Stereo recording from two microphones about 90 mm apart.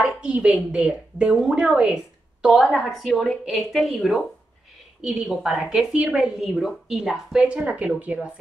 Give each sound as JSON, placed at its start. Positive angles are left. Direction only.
{"t": 0.0, "sound": "a woman's voice", "side_deg": -15}